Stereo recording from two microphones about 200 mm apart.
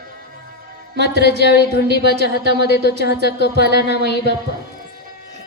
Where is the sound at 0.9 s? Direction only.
55° right (ahead or behind).